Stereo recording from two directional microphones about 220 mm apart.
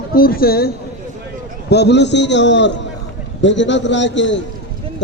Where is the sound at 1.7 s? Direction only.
50° left (ahead or behind).